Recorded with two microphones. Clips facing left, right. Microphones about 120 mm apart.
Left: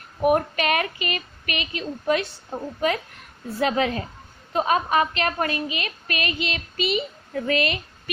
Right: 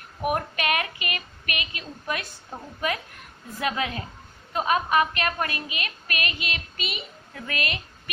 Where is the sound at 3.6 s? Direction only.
30° left (ahead or behind).